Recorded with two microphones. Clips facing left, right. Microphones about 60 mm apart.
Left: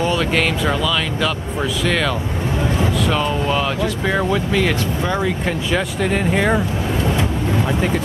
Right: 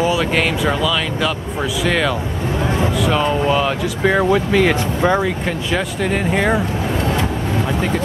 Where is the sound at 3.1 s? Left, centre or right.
Centre.